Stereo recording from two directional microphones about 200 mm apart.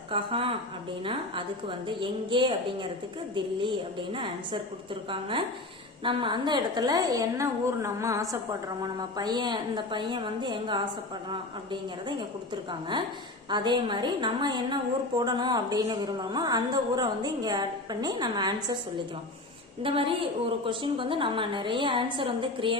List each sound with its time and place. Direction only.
0.1 s a sound: 25° right (ahead or behind)
2.0 s a woman's voice: 25° right (ahead or behind)
6.0 s a woman's voice: 25° right (ahead or behind)
13.5 s a woman's voice: 20° right (ahead or behind)
19.8 s a woman's voice: 25° right (ahead or behind)